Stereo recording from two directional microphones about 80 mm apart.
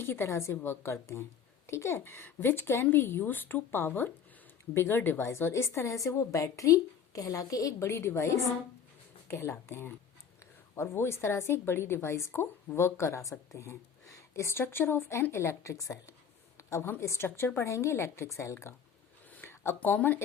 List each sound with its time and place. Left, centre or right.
0.0 s a woman's voice: left
7.9 s a woman's voice: left
16.6 s a sound: left
17.0 s a woman's voice: left
19.3 s speech: left